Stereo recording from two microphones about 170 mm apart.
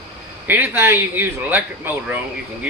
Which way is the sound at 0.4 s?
10° right (ahead or behind).